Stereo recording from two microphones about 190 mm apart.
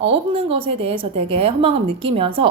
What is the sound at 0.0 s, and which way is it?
A woman's voice, 30° right (ahead or behind).